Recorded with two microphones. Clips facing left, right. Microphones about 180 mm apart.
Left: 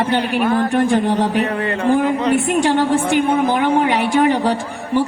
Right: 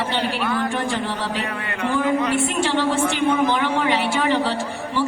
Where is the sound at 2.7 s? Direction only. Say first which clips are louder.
Left 5 dB; 50° left (ahead or behind).